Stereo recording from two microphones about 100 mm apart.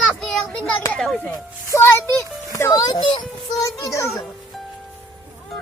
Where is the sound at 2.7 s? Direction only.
45° left (ahead or behind).